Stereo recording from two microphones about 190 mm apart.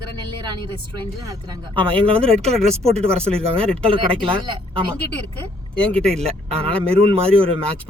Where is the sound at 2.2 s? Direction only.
5° left (ahead or behind).